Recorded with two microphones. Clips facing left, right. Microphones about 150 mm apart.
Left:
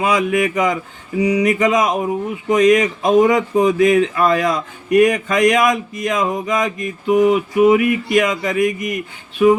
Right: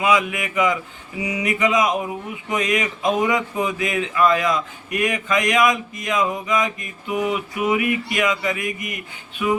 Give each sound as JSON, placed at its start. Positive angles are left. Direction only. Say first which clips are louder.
{"t": 0.0, "sound": "speech", "louder": "left 4 dB", "side_deg": 35}